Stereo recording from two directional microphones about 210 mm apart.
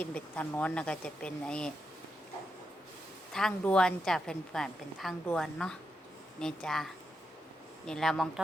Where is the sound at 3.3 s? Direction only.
Centre (ahead or behind).